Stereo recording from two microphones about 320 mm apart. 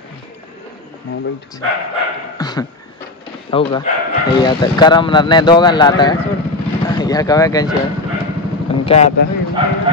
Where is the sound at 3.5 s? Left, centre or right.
Centre.